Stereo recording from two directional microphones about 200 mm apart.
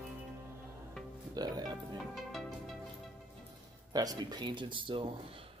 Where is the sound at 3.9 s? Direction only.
20° right (ahead or behind).